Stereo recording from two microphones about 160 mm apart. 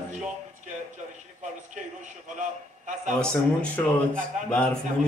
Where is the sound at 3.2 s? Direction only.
5° left (ahead or behind).